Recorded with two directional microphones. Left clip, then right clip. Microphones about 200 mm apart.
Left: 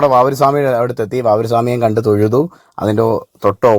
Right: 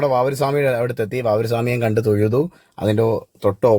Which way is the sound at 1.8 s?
Centre (ahead or behind).